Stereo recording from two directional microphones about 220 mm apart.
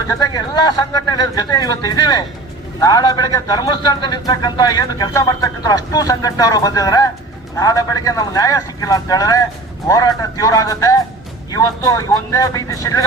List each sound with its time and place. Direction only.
0.1 s speech: 15° left (ahead or behind)